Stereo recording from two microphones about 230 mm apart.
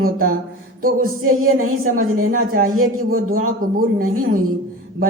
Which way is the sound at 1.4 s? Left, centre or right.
Right.